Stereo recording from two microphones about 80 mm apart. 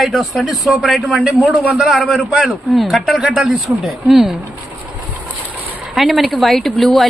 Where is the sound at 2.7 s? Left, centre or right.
Centre.